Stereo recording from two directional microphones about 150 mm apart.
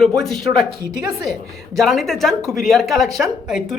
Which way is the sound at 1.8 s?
Centre (ahead or behind).